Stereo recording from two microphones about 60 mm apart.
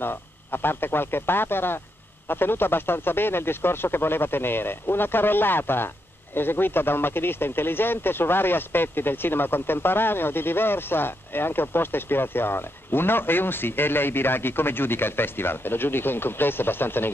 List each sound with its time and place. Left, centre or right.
0.0 s speech: left